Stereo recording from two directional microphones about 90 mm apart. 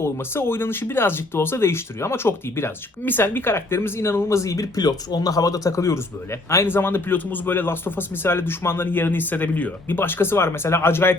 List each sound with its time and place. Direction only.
0.0 s speech: 25° left (ahead or behind)